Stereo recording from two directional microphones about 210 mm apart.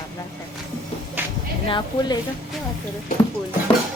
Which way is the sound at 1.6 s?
25° left (ahead or behind).